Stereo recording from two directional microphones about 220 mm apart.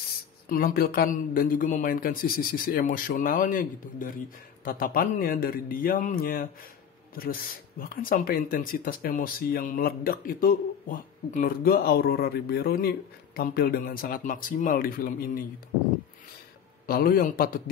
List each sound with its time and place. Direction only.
0.5 s speech: 40° left (ahead or behind)
16.8 s speech: 40° left (ahead or behind)